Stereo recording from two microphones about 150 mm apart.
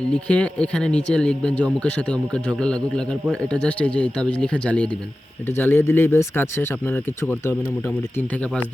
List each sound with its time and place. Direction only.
0.1 s speech: 5° left (ahead or behind)